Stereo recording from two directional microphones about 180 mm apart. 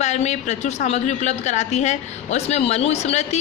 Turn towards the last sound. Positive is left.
turn(degrees=35)  # may be behind; listen again after turning